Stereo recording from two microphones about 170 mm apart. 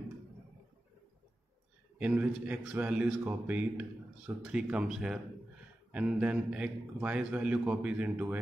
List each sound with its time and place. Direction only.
2.0 s a man's voice: 10° right (ahead or behind)